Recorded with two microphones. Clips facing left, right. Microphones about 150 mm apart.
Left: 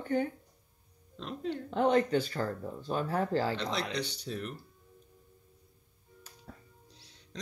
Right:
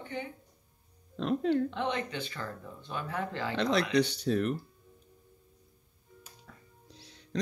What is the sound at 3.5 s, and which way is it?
Speech, 65° right (ahead or behind).